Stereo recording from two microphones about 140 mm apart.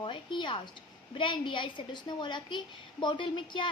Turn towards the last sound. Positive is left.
turn(degrees=35)  # may be behind; listen again after turning